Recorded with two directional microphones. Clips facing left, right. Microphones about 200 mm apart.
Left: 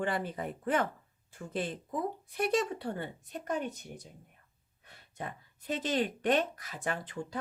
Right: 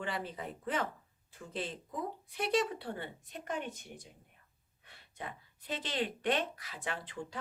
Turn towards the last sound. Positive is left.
turn(degrees=45)  # may be behind; listen again after turning